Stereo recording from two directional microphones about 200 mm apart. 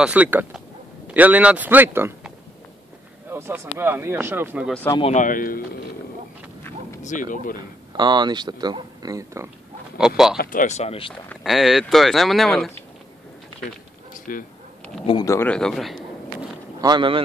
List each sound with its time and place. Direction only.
0.0 s a man's voice: 5° right (ahead or behind)
5.0 s speech: 40° left (ahead or behind)
7.0 s speech: 40° left (ahead or behind)
7.9 s speech: 20° right (ahead or behind)
9.9 s speech: 5° right (ahead or behind)
10.3 s speech: 45° left (ahead or behind); by 11.1 s 30° left (ahead or behind)
11.2 s speech: centre (ahead or behind)
14.3 s speech: 45° left (ahead or behind)
15.0 s a man's voice: 20° left (ahead or behind); by 16.4 s centre (ahead or behind)
16.8 s speech: 25° right (ahead or behind)